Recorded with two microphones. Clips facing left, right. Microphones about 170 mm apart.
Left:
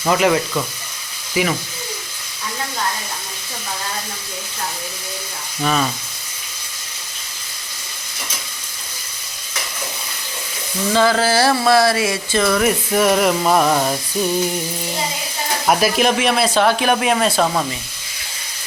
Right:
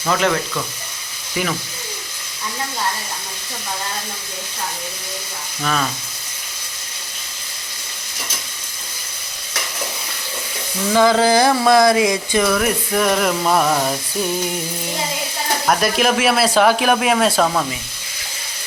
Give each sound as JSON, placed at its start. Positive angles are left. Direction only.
{"t": 0.1, "sound": "speech", "side_deg": 10}
{"t": 5.6, "sound": "speech", "side_deg": 10}
{"t": 10.9, "sound": "speech", "side_deg": -15}
{"t": 12.5, "sound": "speech", "side_deg": 5}
{"t": 15.6, "sound": "speech", "side_deg": 5}